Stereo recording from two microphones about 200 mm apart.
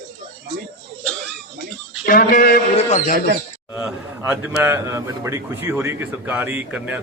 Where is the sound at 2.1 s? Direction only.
45° left (ahead or behind).